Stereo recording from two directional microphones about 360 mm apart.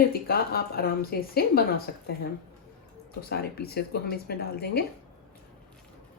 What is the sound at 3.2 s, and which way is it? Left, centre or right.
Speech, left.